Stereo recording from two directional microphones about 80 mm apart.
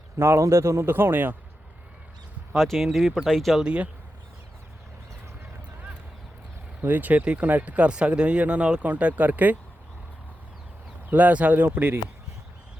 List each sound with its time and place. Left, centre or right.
0.2 s a man's voice: right
2.6 s speech: centre
3.6 s speech: centre
6.8 s speech: right
11.1 s speech: centre